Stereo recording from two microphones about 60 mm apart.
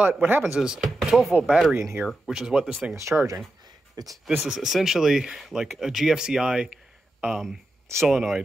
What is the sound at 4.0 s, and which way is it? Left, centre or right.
Speech, right.